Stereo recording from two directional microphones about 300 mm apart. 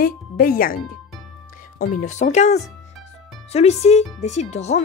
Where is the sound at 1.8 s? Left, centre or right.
Left.